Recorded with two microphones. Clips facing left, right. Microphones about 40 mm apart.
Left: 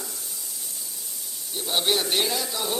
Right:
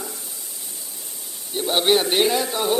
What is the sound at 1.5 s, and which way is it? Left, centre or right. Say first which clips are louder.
A man's voice: right 6 dB; right.